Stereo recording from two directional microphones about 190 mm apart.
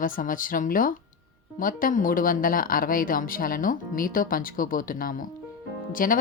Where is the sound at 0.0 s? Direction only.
45° left (ahead or behind).